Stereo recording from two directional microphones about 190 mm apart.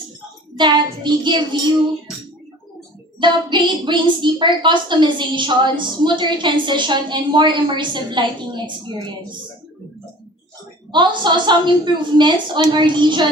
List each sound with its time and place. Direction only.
0.5 s a woman's voice: 25° right (ahead or behind)
3.2 s a woman's voice: 25° right (ahead or behind)
10.9 s a woman's voice: 25° right (ahead or behind)